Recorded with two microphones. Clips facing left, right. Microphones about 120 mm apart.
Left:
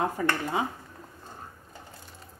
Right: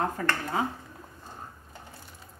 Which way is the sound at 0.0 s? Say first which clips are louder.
Left 2 dB; 10° left (ahead or behind).